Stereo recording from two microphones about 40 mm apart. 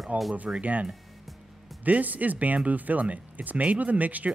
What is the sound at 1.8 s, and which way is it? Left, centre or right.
Speech, right.